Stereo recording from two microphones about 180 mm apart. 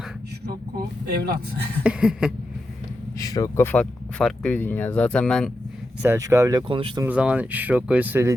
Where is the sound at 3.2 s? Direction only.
20° left (ahead or behind); by 5.5 s 5° left (ahead or behind).